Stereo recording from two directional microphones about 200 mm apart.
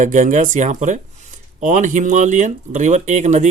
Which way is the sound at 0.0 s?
40° right (ahead or behind).